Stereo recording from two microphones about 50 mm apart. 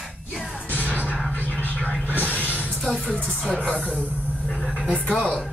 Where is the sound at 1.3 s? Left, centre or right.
Left.